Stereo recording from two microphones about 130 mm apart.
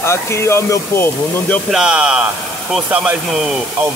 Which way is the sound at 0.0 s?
20° left (ahead or behind).